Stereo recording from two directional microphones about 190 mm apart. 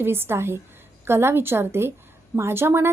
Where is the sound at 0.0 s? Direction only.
10° right (ahead or behind).